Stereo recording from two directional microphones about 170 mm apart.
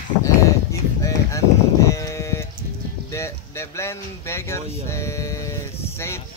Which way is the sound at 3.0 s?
15° left (ahead or behind).